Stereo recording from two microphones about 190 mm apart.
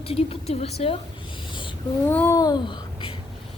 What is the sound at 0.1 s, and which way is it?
Speech, 30° left (ahead or behind).